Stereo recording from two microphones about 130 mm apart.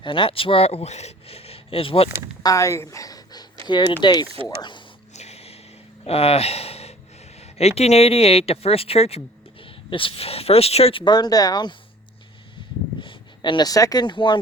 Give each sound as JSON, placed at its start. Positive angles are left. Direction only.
{"t": 0.0, "sound": "speech", "side_deg": 40}
{"t": 2.4, "sound": "speech", "side_deg": 25}
{"t": 5.1, "sound": "snort", "side_deg": 55}
{"t": 6.1, "sound": "speech", "side_deg": 50}
{"t": 11.0, "sound": "speech", "side_deg": 35}
{"t": 13.0, "sound": "speech", "side_deg": 40}